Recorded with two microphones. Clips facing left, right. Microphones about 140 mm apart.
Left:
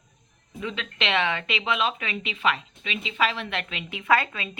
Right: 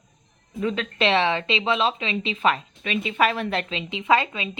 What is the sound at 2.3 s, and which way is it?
A woman's voice, 40° right (ahead or behind).